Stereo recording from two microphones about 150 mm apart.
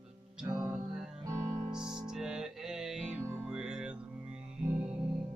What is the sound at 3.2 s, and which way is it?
Music, 20° right (ahead or behind).